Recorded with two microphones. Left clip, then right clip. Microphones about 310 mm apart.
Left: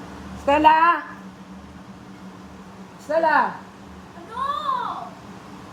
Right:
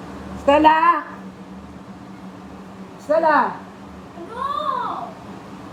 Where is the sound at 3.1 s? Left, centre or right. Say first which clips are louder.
Right 2 dB; left.